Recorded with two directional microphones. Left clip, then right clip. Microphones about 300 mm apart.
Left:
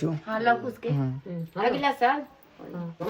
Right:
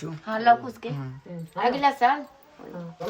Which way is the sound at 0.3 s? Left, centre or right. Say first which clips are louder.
Right 5 dB; right.